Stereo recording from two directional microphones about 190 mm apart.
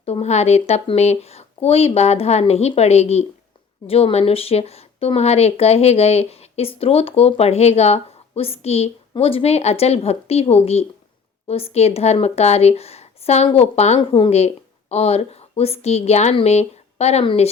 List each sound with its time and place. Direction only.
0.0 s speech: 35° left (ahead or behind)